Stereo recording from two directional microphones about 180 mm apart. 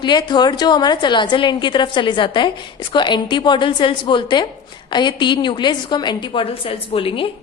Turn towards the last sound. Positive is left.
turn(degrees=30)  # may be behind; listen again after turning